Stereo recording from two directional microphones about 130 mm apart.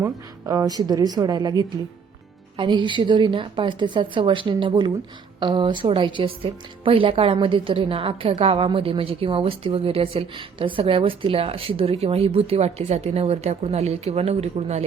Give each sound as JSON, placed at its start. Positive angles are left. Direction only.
{"t": 0.0, "sound": "a woman's voice", "side_deg": -25}